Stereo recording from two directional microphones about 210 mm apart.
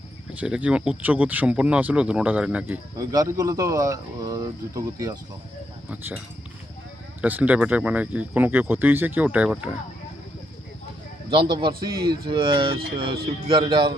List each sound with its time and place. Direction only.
0.3 s speech: 5° right (ahead or behind)
3.0 s speech: 15° right (ahead or behind)
11.3 s speech: 20° right (ahead or behind)